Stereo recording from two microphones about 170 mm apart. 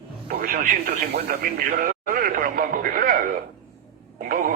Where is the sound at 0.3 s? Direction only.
55° right (ahead or behind).